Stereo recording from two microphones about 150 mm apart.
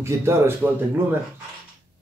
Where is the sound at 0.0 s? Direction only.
15° right (ahead or behind).